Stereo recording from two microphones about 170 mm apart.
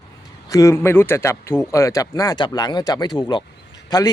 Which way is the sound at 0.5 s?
15° left (ahead or behind).